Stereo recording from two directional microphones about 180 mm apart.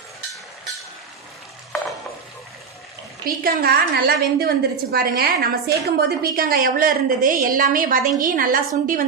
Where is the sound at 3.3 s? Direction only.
55° right (ahead or behind).